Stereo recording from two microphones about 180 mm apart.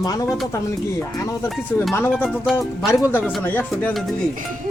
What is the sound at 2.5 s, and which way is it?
Speech, 15° left (ahead or behind).